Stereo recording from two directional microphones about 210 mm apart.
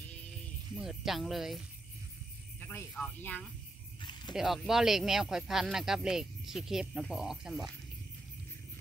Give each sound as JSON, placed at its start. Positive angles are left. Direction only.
{"t": 0.7, "sound": "speech", "side_deg": 0}
{"t": 2.7, "sound": "speech", "side_deg": 10}